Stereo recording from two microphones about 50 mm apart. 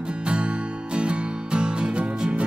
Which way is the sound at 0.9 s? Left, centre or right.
Right.